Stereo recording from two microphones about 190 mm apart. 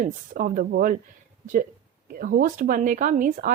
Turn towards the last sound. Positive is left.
turn(degrees=-45)  # may be behind; listen again after turning